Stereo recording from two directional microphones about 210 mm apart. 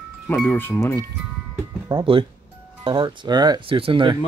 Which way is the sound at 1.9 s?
20° right (ahead or behind).